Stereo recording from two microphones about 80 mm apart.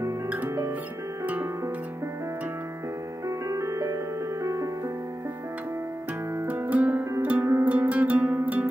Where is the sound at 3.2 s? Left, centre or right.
Right.